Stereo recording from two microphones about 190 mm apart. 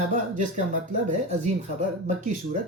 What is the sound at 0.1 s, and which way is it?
Speech, 40° right (ahead or behind).